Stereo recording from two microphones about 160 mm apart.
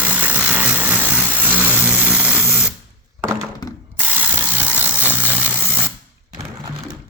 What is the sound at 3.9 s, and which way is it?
Ratchet, 10° right (ahead or behind).